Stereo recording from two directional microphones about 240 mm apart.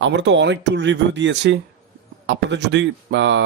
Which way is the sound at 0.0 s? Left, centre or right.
Right.